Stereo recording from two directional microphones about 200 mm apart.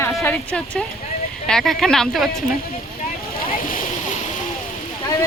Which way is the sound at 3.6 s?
45° left (ahead or behind).